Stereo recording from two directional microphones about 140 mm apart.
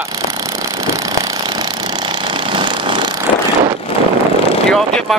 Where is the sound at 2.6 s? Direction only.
35° right (ahead or behind).